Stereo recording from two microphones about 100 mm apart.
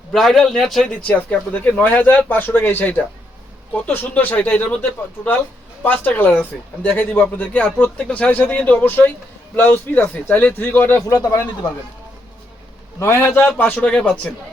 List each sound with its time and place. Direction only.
0.1 s speech: centre (ahead or behind)
1.1 s a man's voice: 15° left (ahead or behind)
11.1 s speech: 30° left (ahead or behind)
13.0 s a man's voice: 25° left (ahead or behind); by 14.2 s 10° left (ahead or behind)